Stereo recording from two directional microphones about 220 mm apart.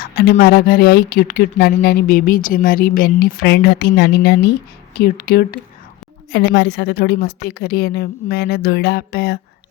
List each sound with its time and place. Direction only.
0.0 s speech: 45° left (ahead or behind)